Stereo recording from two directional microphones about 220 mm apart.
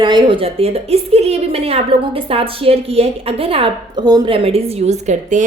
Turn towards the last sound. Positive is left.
turn(degrees=-35)  # may be behind; listen again after turning